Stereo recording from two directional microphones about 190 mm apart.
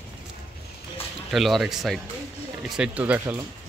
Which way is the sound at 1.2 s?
Centre (ahead or behind).